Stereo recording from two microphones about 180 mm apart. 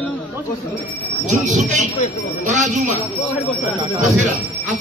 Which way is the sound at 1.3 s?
45° right (ahead or behind).